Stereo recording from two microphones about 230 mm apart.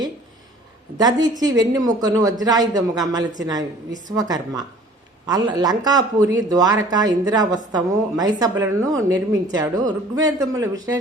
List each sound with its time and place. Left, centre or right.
0.9 s speech: centre